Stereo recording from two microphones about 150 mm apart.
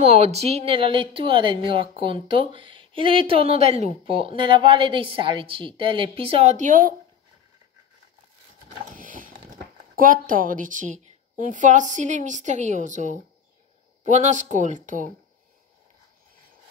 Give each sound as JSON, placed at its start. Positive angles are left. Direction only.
{"t": 0.0, "sound": "speech", "side_deg": -45}
{"t": 8.9, "sound": "typing", "side_deg": -65}
{"t": 9.9, "sound": "a woman's voice", "side_deg": -65}